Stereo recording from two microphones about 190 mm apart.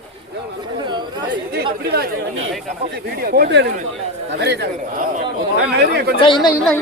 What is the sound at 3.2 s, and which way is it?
Speech, 50° right (ahead or behind).